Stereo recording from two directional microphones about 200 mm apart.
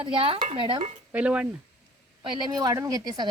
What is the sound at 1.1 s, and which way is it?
Speech, 5° right (ahead or behind).